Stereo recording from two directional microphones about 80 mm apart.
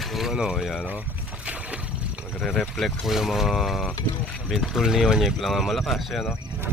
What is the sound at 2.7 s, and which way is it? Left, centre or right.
Speech, centre.